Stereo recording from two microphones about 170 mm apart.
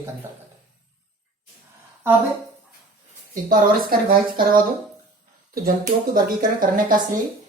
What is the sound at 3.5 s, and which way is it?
Speech, 55° right (ahead or behind).